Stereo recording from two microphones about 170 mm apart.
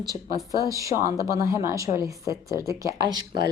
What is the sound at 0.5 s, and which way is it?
A woman's voice, 20° right (ahead or behind).